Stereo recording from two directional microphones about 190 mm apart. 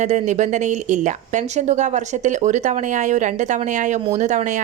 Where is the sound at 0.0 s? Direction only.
40° right (ahead or behind).